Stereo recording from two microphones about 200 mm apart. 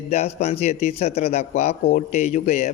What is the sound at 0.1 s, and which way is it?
Speech, 30° left (ahead or behind).